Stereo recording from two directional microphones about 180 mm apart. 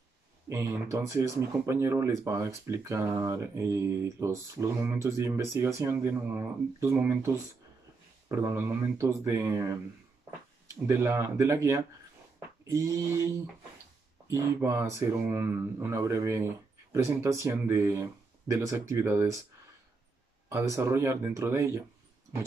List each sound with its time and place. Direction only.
0.5 s speech: 15° right (ahead or behind)
8.3 s speech: 15° right (ahead or behind)
14.3 s speech: 15° right (ahead or behind)
20.4 s speech: 15° right (ahead or behind)